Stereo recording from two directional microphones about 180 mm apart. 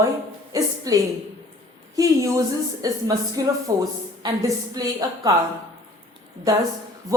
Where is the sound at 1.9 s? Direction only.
20° right (ahead or behind).